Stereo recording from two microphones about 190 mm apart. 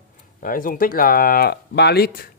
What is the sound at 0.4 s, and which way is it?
Speech, 45° left (ahead or behind).